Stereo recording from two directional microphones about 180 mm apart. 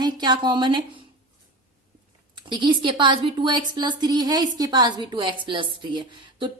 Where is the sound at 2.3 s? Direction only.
25° right (ahead or behind).